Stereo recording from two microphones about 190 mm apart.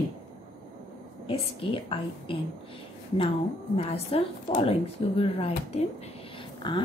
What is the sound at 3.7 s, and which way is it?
Speech, 30° left (ahead or behind).